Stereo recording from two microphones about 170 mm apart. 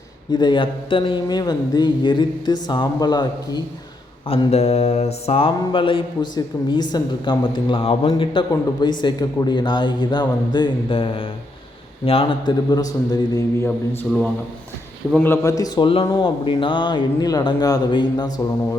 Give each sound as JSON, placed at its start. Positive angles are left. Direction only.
{"t": 0.3, "sound": "a man's voice", "side_deg": 25}
{"t": 4.3, "sound": "mantra", "side_deg": 35}
{"t": 6.9, "sound": "a man's voice", "side_deg": 30}